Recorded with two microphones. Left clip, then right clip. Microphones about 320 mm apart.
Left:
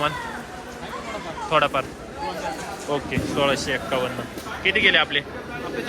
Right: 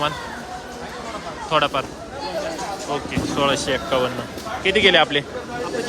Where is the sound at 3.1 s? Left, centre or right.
Centre.